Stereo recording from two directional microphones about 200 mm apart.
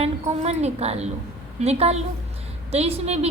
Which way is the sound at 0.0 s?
35° right (ahead or behind).